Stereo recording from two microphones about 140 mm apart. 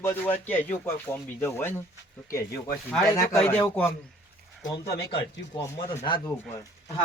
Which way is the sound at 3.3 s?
10° left (ahead or behind).